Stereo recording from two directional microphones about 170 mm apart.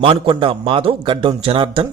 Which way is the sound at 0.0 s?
30° right (ahead or behind).